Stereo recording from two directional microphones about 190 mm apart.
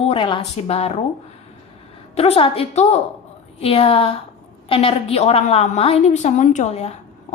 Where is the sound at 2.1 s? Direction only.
30° left (ahead or behind).